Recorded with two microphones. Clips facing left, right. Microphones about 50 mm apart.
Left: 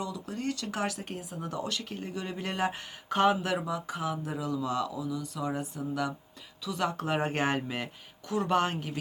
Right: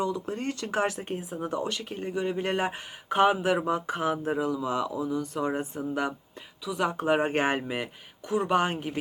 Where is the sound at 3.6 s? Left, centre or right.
Right.